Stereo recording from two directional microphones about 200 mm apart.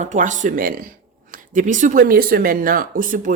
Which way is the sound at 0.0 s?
40° right (ahead or behind).